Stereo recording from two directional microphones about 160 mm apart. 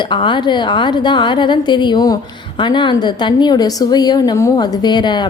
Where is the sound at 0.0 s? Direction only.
30° left (ahead or behind).